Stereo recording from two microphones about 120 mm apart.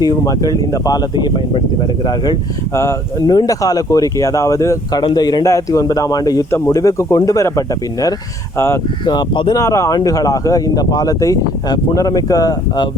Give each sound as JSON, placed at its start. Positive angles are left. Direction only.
{"t": 0.0, "sound": "speech", "side_deg": 30}
{"t": 2.7, "sound": "speech", "side_deg": 25}
{"t": 9.0, "sound": "speech", "side_deg": 40}
{"t": 9.6, "sound": "speech", "side_deg": 25}